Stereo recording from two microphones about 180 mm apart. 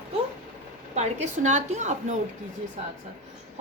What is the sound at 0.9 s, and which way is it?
Speech, 40° right (ahead or behind).